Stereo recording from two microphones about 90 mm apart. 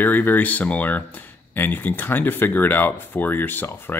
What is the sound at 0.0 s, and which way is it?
Speech, 20° left (ahead or behind).